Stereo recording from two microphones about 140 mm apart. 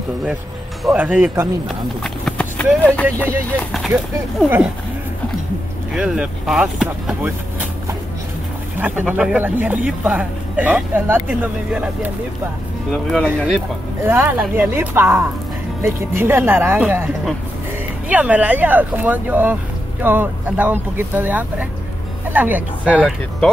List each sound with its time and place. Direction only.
0.8 s speech: 10° right (ahead or behind)
1.7 s speech: 5° left (ahead or behind)
3.9 s speech: 10° right (ahead or behind)
5.9 s speech: 5° right (ahead or behind)
8.7 s speech: 10° right (ahead or behind)
12.9 s speech: 5° left (ahead or behind)
14.0 s speech: 15° right (ahead or behind)